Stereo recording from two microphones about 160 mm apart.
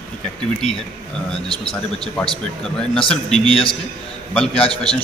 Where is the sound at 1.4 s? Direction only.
35° left (ahead or behind).